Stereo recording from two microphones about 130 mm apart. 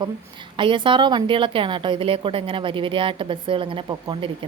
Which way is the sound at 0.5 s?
40° right (ahead or behind).